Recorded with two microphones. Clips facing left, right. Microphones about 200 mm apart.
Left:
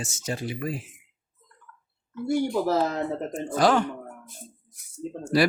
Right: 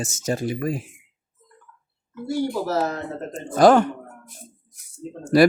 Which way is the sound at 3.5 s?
50° right (ahead or behind).